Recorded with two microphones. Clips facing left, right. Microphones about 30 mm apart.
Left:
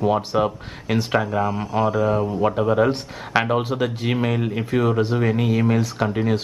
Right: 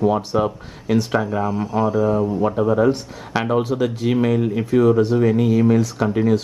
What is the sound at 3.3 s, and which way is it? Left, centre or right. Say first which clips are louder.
Speech: right 1 dB; left.